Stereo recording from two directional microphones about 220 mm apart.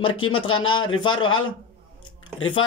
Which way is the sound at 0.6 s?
20° left (ahead or behind).